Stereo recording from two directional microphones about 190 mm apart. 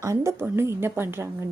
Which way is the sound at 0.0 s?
15° right (ahead or behind).